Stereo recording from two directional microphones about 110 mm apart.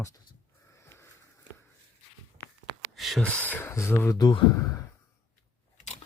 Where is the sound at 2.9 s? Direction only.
Centre (ahead or behind).